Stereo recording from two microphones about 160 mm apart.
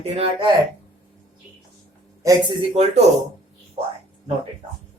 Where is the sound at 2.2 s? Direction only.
20° right (ahead or behind).